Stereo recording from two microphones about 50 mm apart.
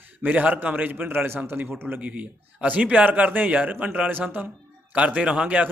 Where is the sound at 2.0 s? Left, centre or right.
Right.